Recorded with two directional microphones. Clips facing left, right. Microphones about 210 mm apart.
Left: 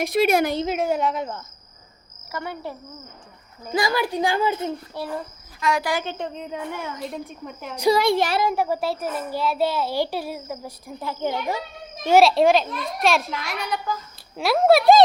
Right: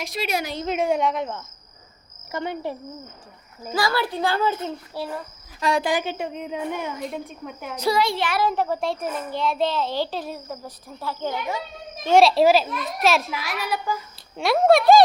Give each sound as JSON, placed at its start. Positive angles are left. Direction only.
{"t": 0.0, "sound": "a woman's voice", "side_deg": 55}
{"t": 0.6, "sound": "a child's voice", "side_deg": 5}
{"t": 2.3, "sound": "a woman's voice", "side_deg": -20}
{"t": 3.7, "sound": "a child's voice", "side_deg": 15}
{"t": 5.5, "sound": "a woman's voice", "side_deg": -35}
{"t": 5.8, "sound": "a woman's voice", "side_deg": -15}
{"t": 7.0, "sound": "a child's voice", "side_deg": 0}
{"t": 7.9, "sound": "a woman's voice", "side_deg": 50}
{"t": 8.4, "sound": "a child's voice", "side_deg": 10}
{"t": 12.0, "sound": "a child's voice", "side_deg": 5}
{"t": 14.3, "sound": "a child's voice", "side_deg": 0}